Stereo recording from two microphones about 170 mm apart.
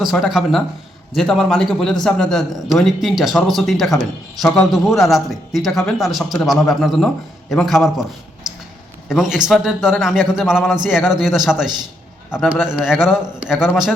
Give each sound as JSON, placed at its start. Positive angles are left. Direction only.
{"t": 0.0, "sound": "a man's voice", "side_deg": 0}
{"t": 8.4, "sound": "a sound", "side_deg": -5}
{"t": 9.0, "sound": "a man's voice", "side_deg": -5}